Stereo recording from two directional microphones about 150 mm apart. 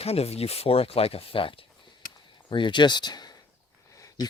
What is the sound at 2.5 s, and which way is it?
Speech, 30° left (ahead or behind).